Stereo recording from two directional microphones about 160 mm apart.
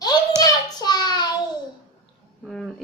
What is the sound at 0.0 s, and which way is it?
Hands, 25° left (ahead or behind).